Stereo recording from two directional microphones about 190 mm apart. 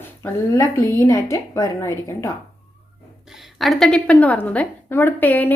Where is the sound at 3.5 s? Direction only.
Centre (ahead or behind).